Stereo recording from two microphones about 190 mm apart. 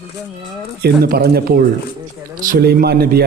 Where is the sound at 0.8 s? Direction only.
55° right (ahead or behind).